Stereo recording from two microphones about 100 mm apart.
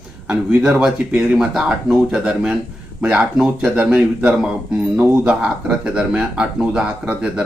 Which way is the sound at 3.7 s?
10° right (ahead or behind).